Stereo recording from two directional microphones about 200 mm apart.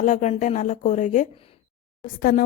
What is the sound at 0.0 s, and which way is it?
A woman's voice, 40° left (ahead or behind).